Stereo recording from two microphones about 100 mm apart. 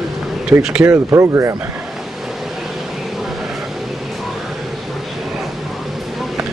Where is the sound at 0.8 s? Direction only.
30° right (ahead or behind).